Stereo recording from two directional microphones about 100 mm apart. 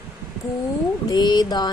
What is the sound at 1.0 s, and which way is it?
Speech, 45° left (ahead or behind).